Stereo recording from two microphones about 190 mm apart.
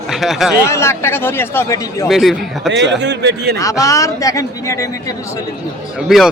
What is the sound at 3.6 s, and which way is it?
A man's voice, 20° left (ahead or behind).